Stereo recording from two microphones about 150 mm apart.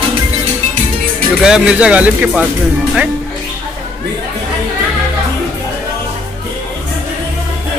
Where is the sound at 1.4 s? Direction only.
5° right (ahead or behind).